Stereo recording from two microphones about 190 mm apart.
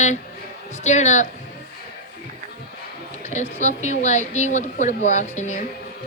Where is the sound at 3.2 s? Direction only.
35° left (ahead or behind).